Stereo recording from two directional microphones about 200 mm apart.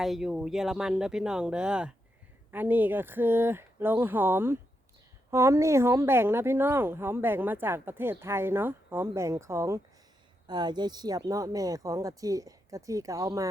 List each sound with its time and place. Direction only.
0.0 s speech: centre (ahead or behind)